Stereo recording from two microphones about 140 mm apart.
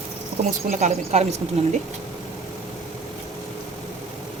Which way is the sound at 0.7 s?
55° right (ahead or behind).